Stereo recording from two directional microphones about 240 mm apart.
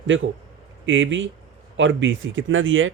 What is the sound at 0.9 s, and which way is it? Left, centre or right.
Speech, right.